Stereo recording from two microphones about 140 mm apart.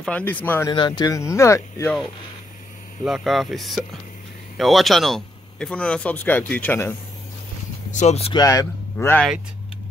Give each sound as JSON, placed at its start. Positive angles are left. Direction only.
{"t": 0.0, "sound": "speech", "side_deg": 10}
{"t": 0.7, "sound": "speech", "side_deg": 30}
{"t": 3.0, "sound": "speech", "side_deg": 0}
{"t": 7.9, "sound": "speech", "side_deg": 55}
{"t": 8.3, "sound": "speech", "side_deg": 25}
{"t": 8.9, "sound": "speech", "side_deg": 10}